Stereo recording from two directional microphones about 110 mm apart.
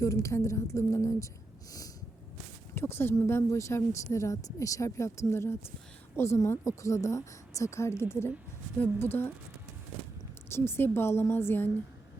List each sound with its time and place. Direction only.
0.0 s speech: 30° left (ahead or behind)
2.7 s speech: 20° left (ahead or behind)
10.5 s speech: 20° left (ahead or behind)